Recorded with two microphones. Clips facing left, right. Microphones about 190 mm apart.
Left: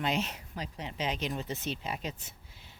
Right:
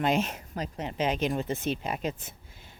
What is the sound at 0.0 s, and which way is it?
Speech, 50° right (ahead or behind).